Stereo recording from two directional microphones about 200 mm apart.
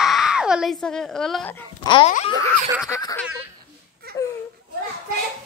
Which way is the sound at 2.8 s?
15° left (ahead or behind).